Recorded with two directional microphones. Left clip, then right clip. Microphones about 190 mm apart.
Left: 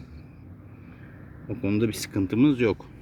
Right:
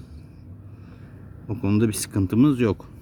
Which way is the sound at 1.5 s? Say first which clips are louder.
Right 2 dB; 25° right (ahead or behind).